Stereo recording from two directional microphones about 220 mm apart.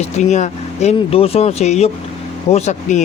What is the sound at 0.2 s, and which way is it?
Speech, 30° left (ahead or behind).